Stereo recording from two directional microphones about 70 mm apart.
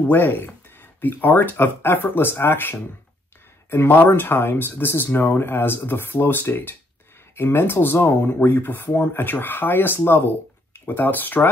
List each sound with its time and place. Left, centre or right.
0.1 s speech: left